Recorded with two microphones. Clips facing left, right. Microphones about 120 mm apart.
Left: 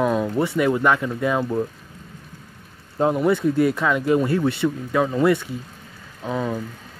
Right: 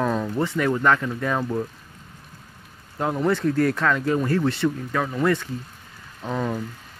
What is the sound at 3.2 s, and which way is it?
Speech, 10° left (ahead or behind).